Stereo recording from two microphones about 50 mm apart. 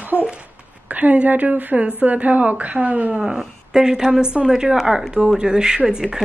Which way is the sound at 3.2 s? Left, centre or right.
Centre.